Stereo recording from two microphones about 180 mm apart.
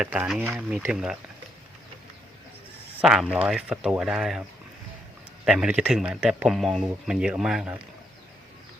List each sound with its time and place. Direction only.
0.0 s speech: 5° right (ahead or behind)
3.0 s speech: 5° right (ahead or behind)
5.5 s speech: 5° right (ahead or behind)